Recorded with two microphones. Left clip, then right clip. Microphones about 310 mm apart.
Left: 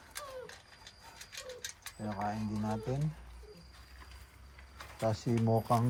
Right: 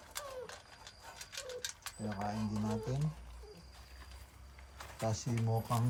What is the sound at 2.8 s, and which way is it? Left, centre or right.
Speech, centre.